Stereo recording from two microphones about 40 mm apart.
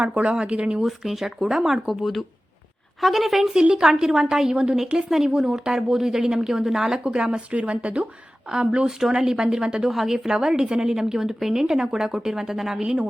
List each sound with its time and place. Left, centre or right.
0.0 s speech: right
0.3 s speech: right
0.8 s a woman's voice: centre
1.9 s a woman's voice: centre; by 8.0 s right
8.4 s a woman's voice: centre